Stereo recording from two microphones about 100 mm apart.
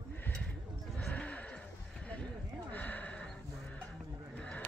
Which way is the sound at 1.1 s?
15° left (ahead or behind).